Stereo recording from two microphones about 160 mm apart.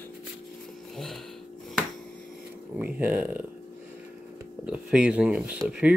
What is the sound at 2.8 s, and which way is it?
Speech, 10° right (ahead or behind).